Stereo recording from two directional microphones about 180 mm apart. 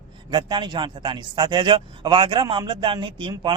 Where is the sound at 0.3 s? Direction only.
25° right (ahead or behind).